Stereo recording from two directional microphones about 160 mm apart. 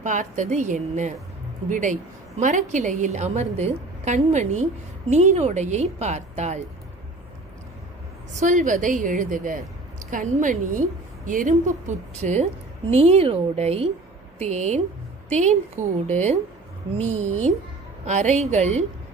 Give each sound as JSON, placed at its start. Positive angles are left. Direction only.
{"t": 0.0, "sound": "a woman's voice", "side_deg": -50}
{"t": 8.3, "sound": "a woman's voice", "side_deg": -50}